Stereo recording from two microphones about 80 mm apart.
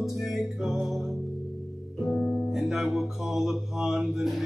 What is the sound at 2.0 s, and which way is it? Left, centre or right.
Music, centre.